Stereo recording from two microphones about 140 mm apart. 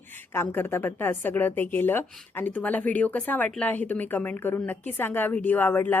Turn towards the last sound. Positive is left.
turn(degrees=15)  # may be behind; listen again after turning